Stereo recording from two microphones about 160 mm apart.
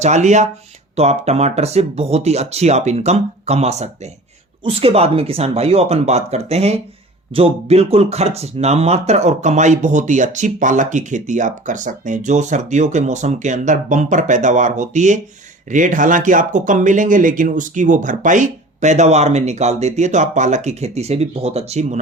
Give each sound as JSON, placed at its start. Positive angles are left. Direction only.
{"t": 0.0, "sound": "speech", "side_deg": -45}